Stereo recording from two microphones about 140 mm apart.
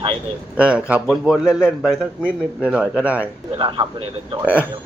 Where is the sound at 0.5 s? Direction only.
10° right (ahead or behind).